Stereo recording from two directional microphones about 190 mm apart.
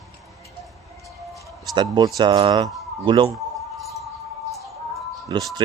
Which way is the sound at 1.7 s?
25° right (ahead or behind).